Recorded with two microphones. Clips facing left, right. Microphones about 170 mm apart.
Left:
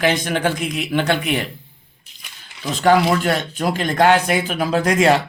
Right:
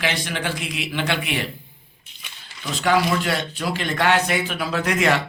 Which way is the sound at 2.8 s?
45° left (ahead or behind).